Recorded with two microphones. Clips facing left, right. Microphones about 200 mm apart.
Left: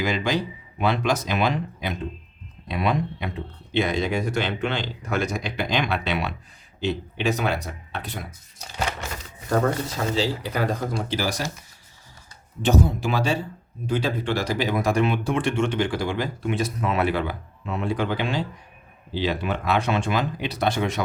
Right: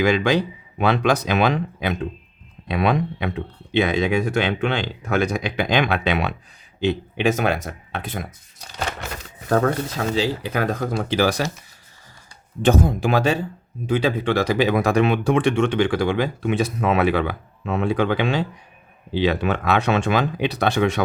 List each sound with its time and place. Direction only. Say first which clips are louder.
0.0 s speech: right 6 dB; 65° right (ahead or behind); by 8.3 s 50° right (ahead or behind)
10.2 s speech: right 3 dB; 55° right (ahead or behind)
12.6 s speech: right 3 dB; 55° right (ahead or behind); by 21.0 s 70° right (ahead or behind)